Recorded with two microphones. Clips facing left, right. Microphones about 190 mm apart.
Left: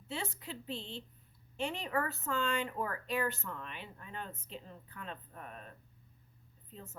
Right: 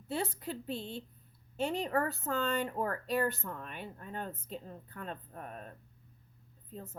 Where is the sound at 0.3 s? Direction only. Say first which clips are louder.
Right 5 dB; 45° right (ahead or behind).